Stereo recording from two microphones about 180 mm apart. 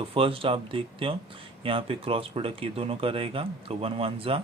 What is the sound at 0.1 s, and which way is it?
Speech, 30° right (ahead or behind).